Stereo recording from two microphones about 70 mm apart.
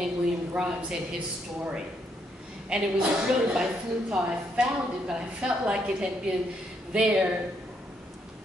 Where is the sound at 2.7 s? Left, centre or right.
Centre.